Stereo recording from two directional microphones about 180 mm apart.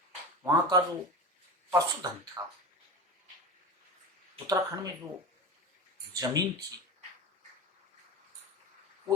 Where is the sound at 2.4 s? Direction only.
20° right (ahead or behind).